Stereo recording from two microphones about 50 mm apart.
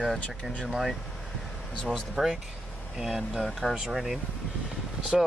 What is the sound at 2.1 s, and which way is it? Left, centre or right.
Speech, centre.